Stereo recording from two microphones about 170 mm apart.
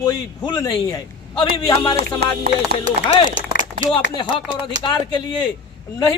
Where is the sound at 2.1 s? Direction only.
65° right (ahead or behind).